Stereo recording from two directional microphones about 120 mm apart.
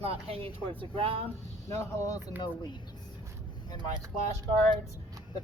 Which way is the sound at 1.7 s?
25° left (ahead or behind).